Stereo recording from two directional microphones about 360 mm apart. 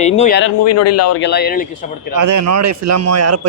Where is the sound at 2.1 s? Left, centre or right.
Right.